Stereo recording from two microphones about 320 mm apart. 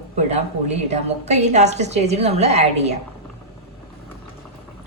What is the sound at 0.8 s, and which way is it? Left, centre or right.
Speech, right.